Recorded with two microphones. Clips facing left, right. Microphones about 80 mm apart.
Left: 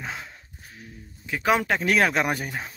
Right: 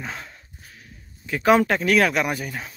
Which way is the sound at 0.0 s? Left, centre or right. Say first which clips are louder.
Right 1 dB; centre.